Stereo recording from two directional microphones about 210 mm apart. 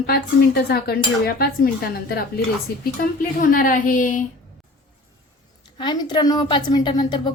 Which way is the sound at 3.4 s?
40° left (ahead or behind).